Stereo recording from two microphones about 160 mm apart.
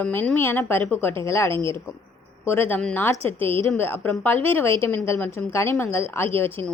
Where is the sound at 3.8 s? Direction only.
10° left (ahead or behind).